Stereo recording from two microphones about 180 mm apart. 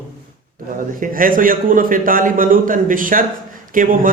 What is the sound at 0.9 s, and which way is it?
A man's voice, 50° right (ahead or behind).